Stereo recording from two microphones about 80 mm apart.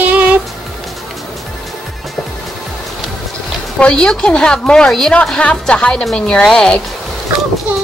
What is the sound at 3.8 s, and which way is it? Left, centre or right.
A woman's voice, centre.